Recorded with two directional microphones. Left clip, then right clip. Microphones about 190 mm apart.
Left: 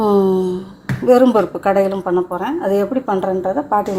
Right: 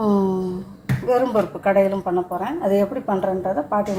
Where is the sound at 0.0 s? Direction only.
40° left (ahead or behind).